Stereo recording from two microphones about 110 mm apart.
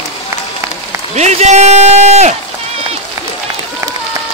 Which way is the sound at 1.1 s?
90° right.